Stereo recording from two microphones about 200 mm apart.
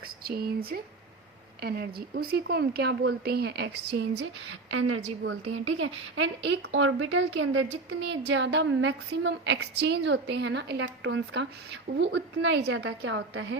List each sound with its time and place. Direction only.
0.3 s speech: 50° right (ahead or behind); by 4.9 s 85° right
5.2 s speech: 70° right (ahead or behind)